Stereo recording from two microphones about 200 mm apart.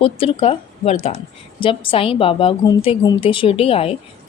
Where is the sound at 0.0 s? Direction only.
30° left (ahead or behind).